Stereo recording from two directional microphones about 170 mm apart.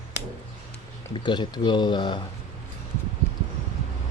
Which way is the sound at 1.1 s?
25° left (ahead or behind).